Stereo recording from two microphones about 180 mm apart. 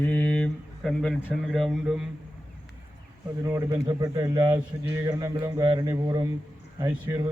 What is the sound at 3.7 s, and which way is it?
A man's voice, 20° right (ahead or behind).